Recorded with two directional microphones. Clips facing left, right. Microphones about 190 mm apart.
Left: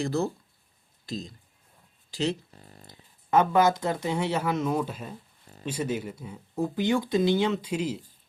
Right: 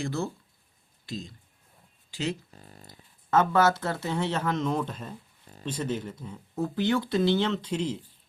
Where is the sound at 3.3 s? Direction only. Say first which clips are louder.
Left 1 dB; 15° left (ahead or behind).